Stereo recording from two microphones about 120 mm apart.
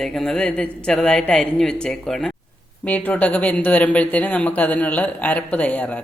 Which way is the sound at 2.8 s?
15° left (ahead or behind).